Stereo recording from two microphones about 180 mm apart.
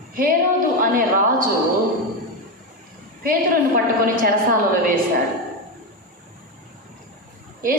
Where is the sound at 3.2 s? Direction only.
50° right (ahead or behind).